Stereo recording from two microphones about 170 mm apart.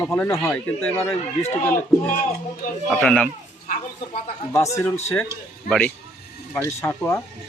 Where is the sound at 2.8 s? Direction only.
5° left (ahead or behind).